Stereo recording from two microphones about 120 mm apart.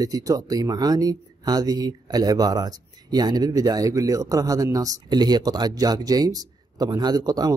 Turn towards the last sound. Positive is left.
turn(degrees=-30)  # may be behind; listen again after turning